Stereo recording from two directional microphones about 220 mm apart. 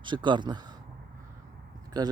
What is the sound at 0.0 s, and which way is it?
Speech, 20° right (ahead or behind).